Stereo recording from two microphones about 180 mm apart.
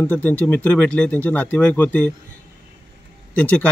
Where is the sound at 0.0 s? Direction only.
10° left (ahead or behind).